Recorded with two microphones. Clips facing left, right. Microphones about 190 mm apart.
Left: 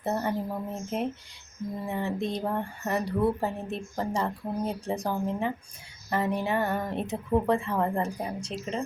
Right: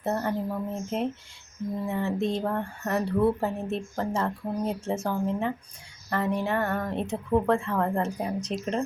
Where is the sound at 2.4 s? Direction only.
5° left (ahead or behind).